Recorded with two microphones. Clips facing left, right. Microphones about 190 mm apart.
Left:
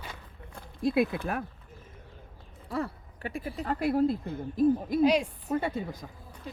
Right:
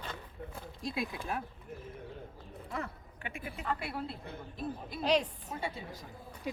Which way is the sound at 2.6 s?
35° left (ahead or behind).